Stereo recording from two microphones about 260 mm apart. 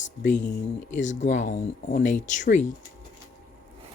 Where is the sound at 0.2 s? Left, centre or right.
Left.